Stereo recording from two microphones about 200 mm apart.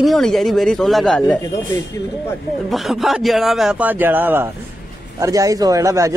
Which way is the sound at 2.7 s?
Centre (ahead or behind).